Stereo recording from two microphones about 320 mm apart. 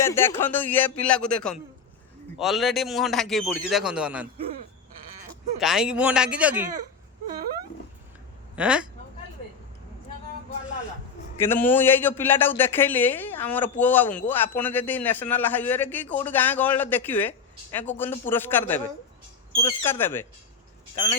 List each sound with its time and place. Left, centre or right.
0.0 s speech: centre
5.5 s speech: centre
8.5 s speech: centre
11.4 s speech: centre